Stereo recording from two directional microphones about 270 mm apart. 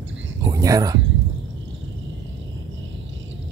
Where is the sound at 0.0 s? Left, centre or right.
Right.